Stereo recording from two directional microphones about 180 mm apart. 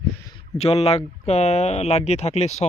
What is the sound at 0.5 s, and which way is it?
Speech, 35° left (ahead or behind).